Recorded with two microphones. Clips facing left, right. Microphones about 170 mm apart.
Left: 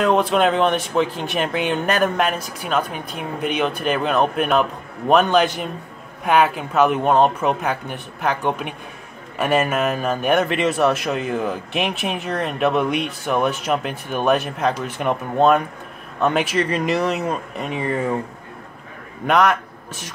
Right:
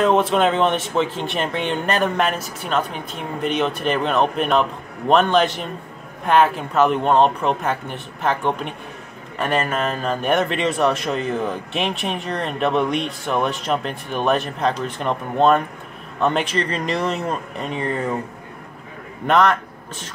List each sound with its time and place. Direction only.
0.0 s a man's voice: centre (ahead or behind)
19.2 s speech: 5° left (ahead or behind)